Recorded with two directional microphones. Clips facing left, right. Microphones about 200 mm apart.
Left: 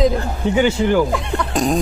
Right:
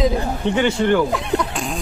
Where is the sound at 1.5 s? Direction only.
40° left (ahead or behind).